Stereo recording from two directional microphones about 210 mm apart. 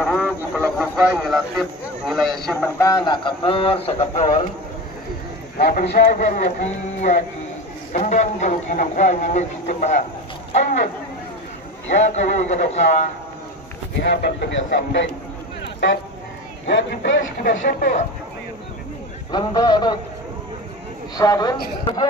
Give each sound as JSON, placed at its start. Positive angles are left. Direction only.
{"t": 0.6, "sound": "a man's voice", "side_deg": 5}
{"t": 5.6, "sound": "a man's voice", "side_deg": 45}
{"t": 12.0, "sound": "a man's voice", "side_deg": 35}
{"t": 14.0, "sound": "speech", "side_deg": 55}
{"t": 15.6, "sound": "a sound", "side_deg": 55}
{"t": 16.6, "sound": "speech", "side_deg": 60}
{"t": 17.5, "sound": "speech", "side_deg": 45}
{"t": 19.3, "sound": "a man's voice", "side_deg": 20}
{"t": 21.2, "sound": "a man's voice", "side_deg": 20}